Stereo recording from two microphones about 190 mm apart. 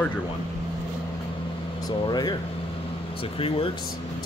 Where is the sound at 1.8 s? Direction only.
20° left (ahead or behind).